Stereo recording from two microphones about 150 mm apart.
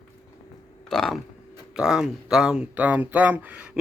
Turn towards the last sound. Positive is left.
turn(degrees=-10)  # may be behind; listen again after turning